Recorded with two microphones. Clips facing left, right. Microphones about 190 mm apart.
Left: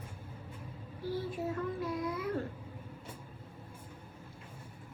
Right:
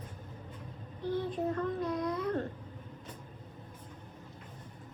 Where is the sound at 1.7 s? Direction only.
5° left (ahead or behind).